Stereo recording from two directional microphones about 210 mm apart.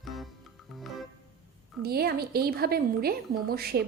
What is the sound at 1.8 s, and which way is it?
A woman's voice, 45° right (ahead or behind).